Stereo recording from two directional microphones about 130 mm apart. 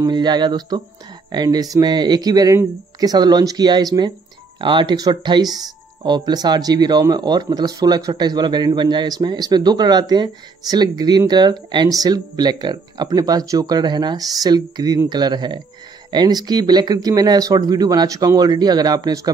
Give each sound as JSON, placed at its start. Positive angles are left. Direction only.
{"t": 0.0, "sound": "speech", "side_deg": -35}